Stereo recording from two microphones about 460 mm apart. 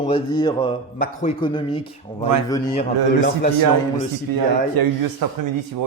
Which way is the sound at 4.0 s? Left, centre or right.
Right.